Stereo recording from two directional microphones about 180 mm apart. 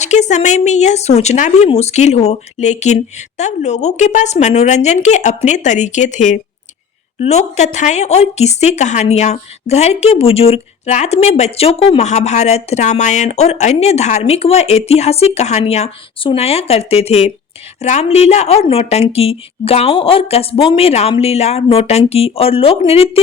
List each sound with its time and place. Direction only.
0.0 s a woman's voice: 40° left (ahead or behind)